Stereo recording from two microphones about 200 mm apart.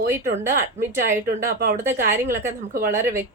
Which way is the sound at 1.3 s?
50° right (ahead or behind).